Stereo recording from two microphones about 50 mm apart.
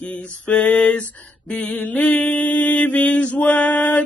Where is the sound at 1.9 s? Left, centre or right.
Left.